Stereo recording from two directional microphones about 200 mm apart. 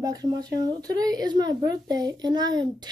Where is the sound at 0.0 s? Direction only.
20° right (ahead or behind).